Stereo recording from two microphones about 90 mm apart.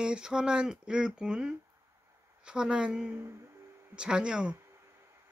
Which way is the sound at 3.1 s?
30° right (ahead or behind).